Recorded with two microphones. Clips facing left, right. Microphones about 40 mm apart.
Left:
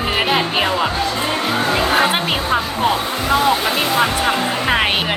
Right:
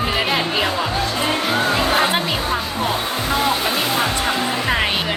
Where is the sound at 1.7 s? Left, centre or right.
Left.